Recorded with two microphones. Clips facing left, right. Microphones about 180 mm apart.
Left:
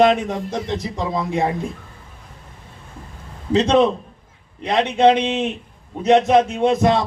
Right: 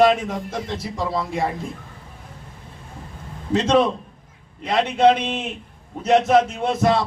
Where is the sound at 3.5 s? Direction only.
20° left (ahead or behind).